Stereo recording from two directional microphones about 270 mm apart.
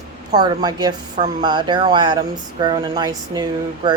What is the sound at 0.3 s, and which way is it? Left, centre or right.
Speech, centre.